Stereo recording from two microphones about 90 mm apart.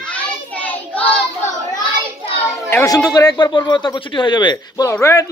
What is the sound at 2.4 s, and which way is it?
Speech, 30° left (ahead or behind).